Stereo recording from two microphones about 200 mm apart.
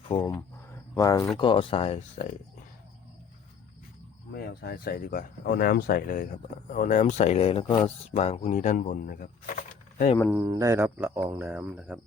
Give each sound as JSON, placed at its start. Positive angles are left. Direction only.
{"t": 0.1, "sound": "speech", "side_deg": 20}
{"t": 4.4, "sound": "speech", "side_deg": 50}
{"t": 10.2, "sound": "speech", "side_deg": -10}